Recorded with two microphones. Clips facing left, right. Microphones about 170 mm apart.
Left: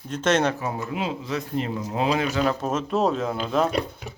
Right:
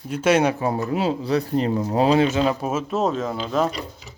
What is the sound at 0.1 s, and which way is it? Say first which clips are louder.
Speech: right 3 dB; 10° right (ahead or behind).